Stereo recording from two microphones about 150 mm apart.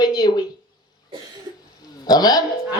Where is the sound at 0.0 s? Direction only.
25° left (ahead or behind).